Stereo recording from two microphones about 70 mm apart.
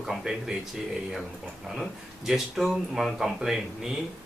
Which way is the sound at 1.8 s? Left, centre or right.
Centre.